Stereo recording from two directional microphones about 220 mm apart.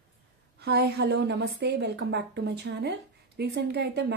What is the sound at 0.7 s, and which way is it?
A woman's voice, 50° right (ahead or behind).